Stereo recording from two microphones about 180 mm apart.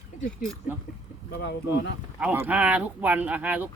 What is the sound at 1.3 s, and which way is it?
Speech, 70° left (ahead or behind).